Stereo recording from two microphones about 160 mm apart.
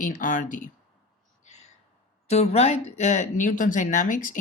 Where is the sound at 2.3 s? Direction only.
45° left (ahead or behind).